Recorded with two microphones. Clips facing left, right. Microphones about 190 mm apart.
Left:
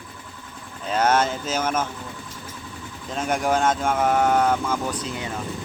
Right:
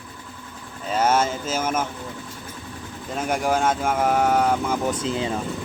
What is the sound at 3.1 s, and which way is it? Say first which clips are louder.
Speech: even; 10° right (ahead or behind).